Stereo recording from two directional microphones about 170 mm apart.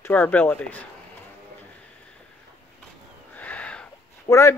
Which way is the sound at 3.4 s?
10° left (ahead or behind).